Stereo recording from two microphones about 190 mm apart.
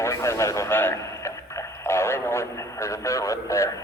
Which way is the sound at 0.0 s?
15° left (ahead or behind).